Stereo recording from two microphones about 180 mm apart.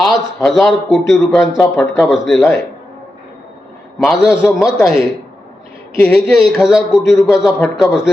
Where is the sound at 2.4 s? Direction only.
10° left (ahead or behind).